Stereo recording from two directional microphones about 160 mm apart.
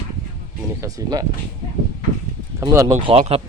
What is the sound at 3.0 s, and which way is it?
Speech, 35° right (ahead or behind).